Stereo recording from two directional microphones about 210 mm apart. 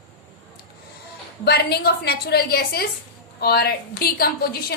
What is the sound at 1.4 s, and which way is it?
A woman's voice, 50° left (ahead or behind).